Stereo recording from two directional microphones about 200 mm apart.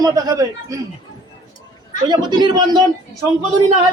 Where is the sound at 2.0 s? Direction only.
20° right (ahead or behind).